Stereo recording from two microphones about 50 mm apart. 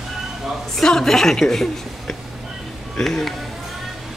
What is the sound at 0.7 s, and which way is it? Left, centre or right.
Speech, centre.